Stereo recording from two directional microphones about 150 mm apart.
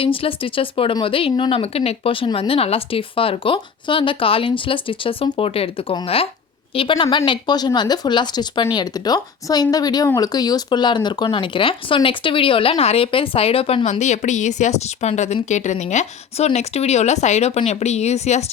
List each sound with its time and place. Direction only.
0.0 s speech: 35° left (ahead or behind)
14.0 s speech: 50° left (ahead or behind)